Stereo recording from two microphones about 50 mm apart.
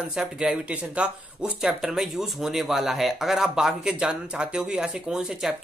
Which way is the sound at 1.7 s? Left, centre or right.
Centre.